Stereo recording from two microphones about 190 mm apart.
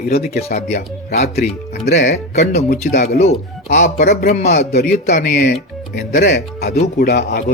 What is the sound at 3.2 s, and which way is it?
Speech, 40° left (ahead or behind).